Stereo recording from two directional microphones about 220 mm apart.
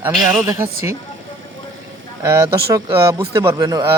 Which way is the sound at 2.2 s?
10° right (ahead or behind).